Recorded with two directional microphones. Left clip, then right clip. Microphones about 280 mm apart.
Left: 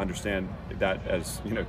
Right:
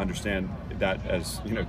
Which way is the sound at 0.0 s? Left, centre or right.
Centre.